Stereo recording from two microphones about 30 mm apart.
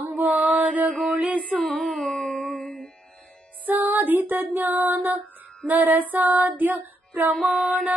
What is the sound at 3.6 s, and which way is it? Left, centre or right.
Music, right.